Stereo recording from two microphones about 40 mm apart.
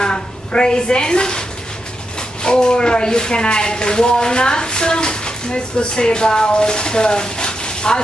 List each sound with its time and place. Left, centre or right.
0.0 s a woman's voice: left
2.4 s speech: left